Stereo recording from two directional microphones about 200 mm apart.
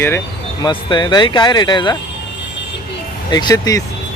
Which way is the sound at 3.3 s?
20° left (ahead or behind).